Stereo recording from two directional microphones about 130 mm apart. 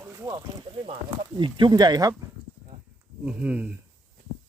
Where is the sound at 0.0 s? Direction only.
25° right (ahead or behind).